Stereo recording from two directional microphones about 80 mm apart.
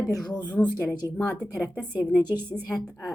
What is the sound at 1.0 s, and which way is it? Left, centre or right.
Speech, right.